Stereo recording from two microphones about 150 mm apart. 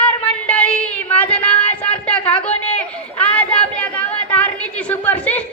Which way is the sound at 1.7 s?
10° left (ahead or behind).